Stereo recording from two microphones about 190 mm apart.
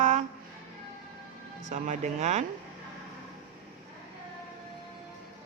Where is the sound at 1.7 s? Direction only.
40° right (ahead or behind).